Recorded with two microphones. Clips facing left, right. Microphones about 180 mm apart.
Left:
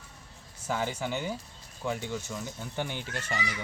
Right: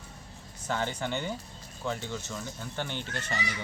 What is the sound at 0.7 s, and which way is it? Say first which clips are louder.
Speech: even; 5° left (ahead or behind).